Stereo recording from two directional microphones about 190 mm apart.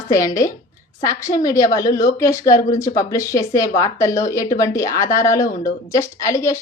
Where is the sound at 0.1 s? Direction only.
15° left (ahead or behind).